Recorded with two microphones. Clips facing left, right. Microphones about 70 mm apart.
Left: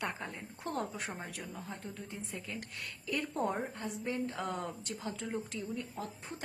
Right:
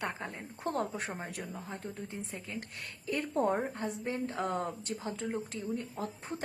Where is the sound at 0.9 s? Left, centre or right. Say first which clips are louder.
Right 3 dB; right.